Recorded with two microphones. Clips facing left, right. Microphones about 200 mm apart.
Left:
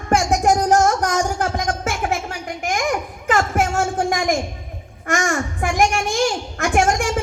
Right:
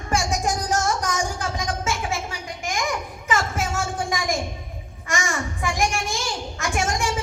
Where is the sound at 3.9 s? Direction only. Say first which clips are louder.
Left 6 dB; 70° left (ahead or behind).